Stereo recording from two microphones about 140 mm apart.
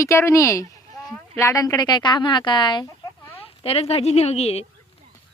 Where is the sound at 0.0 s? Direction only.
20° left (ahead or behind).